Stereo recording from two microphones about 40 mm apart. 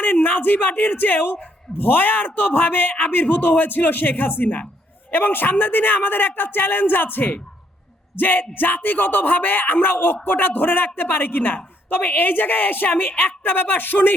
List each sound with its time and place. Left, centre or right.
0.0 s a woman's voice: left